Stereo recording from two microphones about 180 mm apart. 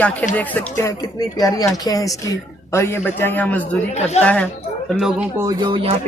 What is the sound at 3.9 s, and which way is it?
Speech, 40° left (ahead or behind).